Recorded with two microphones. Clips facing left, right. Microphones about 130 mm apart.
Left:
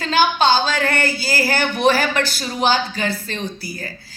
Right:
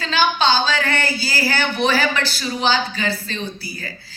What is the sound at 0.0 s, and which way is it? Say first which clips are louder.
Speech: left 2 dB; 50° left (ahead or behind).